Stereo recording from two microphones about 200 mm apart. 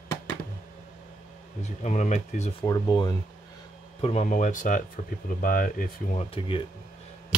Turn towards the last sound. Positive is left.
turn(degrees=25)  # may be behind; listen again after turning